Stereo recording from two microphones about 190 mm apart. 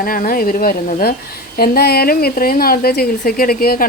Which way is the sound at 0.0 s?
50° left (ahead or behind).